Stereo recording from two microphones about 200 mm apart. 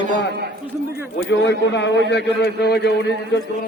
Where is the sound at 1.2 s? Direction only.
60° left (ahead or behind).